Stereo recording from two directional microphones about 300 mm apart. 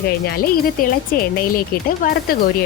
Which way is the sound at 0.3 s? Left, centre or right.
Left.